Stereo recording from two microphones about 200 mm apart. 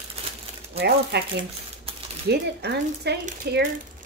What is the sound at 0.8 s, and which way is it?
Speech, 55° right (ahead or behind).